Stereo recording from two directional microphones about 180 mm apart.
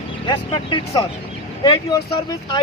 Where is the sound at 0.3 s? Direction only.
25° left (ahead or behind).